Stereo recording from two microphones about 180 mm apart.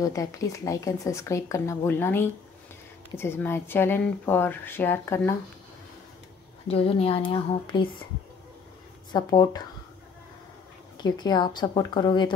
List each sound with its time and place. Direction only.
0.0 s speech: 20° left (ahead or behind)
6.7 s speech: 30° left (ahead or behind)
9.1 s speech: 25° left (ahead or behind)
11.0 s speech: 25° left (ahead or behind)